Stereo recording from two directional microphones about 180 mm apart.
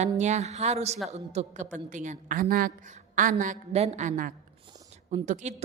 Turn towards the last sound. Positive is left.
turn(degrees=-40)  # may be behind; listen again after turning